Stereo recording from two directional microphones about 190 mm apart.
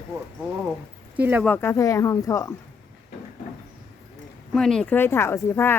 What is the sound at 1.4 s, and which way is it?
Speech, 10° left (ahead or behind).